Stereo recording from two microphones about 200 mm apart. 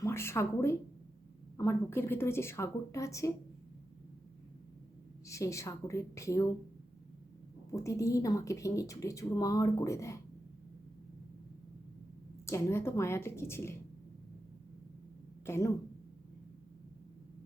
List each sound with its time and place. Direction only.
0.0 s a woman's voice: 10° left (ahead or behind)
5.2 s a woman's voice: 15° left (ahead or behind)
7.7 s a woman's voice: 15° left (ahead or behind)
12.5 s a woman's voice: 15° left (ahead or behind)
15.4 s speech: 10° left (ahead or behind)